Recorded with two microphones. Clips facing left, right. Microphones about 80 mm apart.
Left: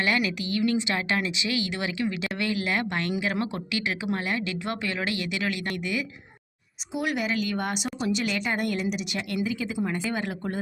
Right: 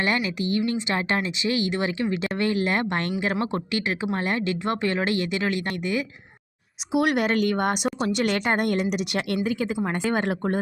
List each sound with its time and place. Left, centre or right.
0.0 s speech: right
6.9 s speech: right